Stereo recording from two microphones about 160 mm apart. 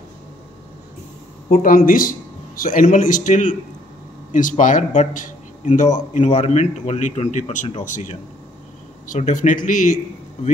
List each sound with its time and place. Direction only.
1.5 s a man's voice: 60° left (ahead or behind)